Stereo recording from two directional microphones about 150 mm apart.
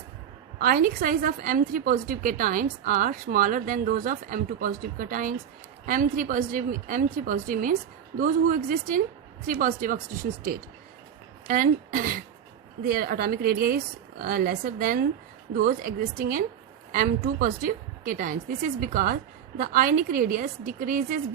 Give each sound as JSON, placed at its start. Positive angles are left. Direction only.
{"t": 0.6, "sound": "a woman's voice", "side_deg": -70}
{"t": 12.8, "sound": "a woman's voice", "side_deg": -85}